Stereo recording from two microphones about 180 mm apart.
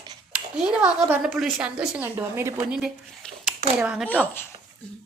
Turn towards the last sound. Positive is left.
turn(degrees=10)  # may be behind; listen again after turning